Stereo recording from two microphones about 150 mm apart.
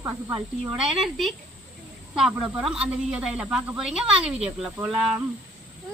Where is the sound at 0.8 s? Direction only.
Centre (ahead or behind).